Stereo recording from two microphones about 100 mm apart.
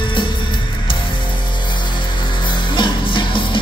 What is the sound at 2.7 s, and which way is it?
Music, 55° left (ahead or behind).